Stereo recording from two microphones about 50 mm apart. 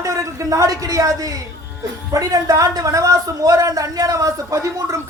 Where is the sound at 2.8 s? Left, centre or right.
Right.